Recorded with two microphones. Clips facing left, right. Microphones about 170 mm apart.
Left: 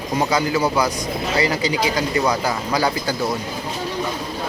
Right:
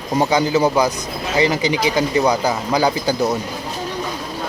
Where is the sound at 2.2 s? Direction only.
15° right (ahead or behind).